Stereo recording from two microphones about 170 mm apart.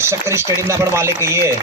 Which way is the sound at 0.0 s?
15° right (ahead or behind).